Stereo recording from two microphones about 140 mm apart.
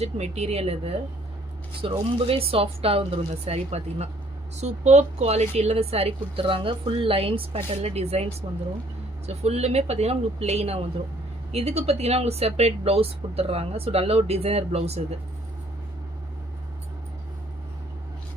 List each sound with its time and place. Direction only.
0.0 s a woman's voice: 50° right (ahead or behind)
1.8 s a woman's voice: 40° right (ahead or behind)